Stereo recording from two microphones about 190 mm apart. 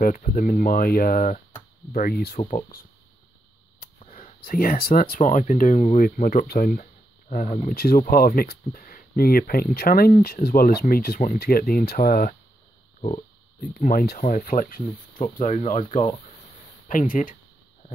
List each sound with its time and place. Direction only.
0.0 s speech: 45° left (ahead or behind)
2.3 s speech: 40° left (ahead or behind)
4.0 s a sound: 40° left (ahead or behind)
5.1 s speech: 45° left (ahead or behind)